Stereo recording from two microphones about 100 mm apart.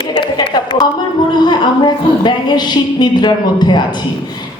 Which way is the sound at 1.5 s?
50° left (ahead or behind).